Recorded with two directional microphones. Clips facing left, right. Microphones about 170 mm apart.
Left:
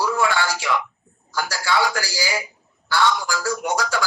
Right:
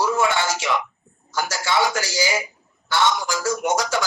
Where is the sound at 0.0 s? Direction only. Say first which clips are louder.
Right 1 dB; 20° right (ahead or behind).